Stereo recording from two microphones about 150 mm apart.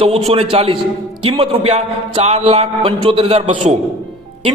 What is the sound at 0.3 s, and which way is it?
A man's voice, 40° right (ahead or behind).